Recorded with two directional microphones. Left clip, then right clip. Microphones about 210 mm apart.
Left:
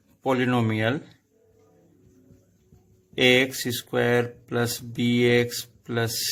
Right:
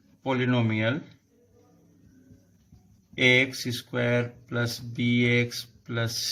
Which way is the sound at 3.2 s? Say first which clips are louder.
Left 2 dB; 55° left (ahead or behind).